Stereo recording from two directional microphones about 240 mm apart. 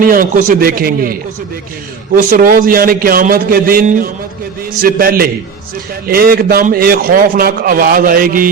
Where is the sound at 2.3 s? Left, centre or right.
Right.